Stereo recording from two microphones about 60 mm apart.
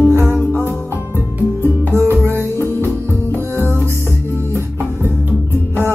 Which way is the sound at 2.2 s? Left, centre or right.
Right.